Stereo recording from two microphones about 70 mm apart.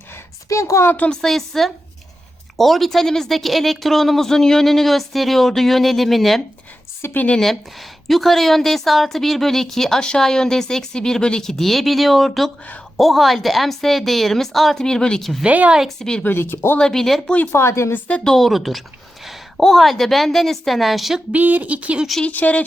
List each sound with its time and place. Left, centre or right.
0.4 s speech: left
0.9 s speech: centre
1.2 s a woman's voice: centre
7.0 s speech: left
7.3 s a woman's voice: centre
15.4 s speech: centre
16.0 s speech: centre
16.2 s speech: left
16.7 s a woman's voice: centre
17.5 s speech: left
18.1 s a woman's voice: centre
21.3 s speech: right
22.2 s speech: left